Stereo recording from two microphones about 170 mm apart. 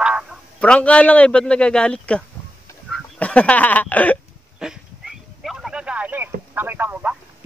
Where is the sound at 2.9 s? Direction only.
5° left (ahead or behind).